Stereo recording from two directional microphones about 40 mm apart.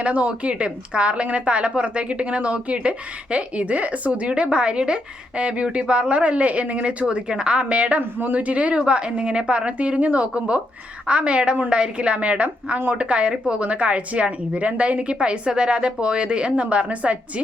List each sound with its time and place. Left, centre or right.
0.0 s a woman's voice: right
7.6 s a woman's voice: right